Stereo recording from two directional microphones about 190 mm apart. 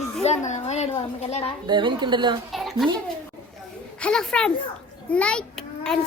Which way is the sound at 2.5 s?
Centre (ahead or behind).